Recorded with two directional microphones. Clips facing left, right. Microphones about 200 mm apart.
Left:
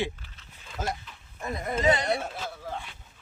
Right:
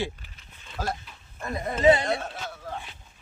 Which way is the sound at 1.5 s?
25° right (ahead or behind).